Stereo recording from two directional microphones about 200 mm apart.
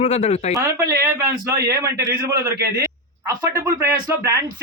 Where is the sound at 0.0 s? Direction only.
35° left (ahead or behind).